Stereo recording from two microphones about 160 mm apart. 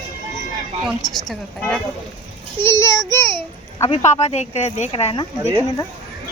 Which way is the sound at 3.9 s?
40° left (ahead or behind).